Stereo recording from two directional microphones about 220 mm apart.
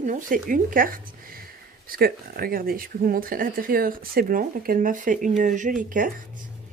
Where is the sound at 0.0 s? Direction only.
35° right (ahead or behind).